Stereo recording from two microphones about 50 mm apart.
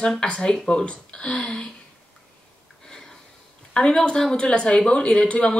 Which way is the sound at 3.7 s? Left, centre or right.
Centre.